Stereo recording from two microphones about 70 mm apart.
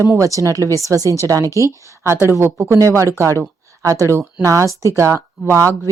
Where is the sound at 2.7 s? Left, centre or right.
Right.